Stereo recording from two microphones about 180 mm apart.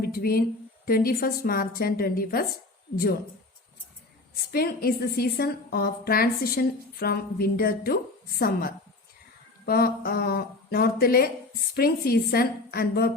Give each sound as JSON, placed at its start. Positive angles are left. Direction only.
{"t": 0.0, "sound": "a woman's voice", "side_deg": 55}
{"t": 4.5, "sound": "a woman's voice", "side_deg": 60}